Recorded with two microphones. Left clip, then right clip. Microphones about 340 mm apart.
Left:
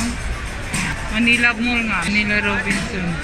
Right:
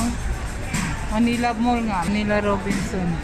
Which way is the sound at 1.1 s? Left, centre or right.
Centre.